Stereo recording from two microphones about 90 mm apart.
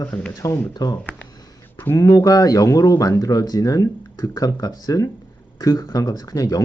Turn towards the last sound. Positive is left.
turn(degrees=40)  # may be behind; listen again after turning